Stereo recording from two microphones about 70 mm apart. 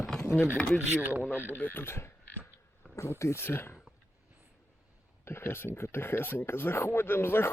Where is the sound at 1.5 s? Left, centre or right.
Left.